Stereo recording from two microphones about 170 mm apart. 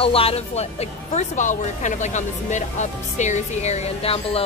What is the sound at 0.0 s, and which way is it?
Speech, 35° left (ahead or behind).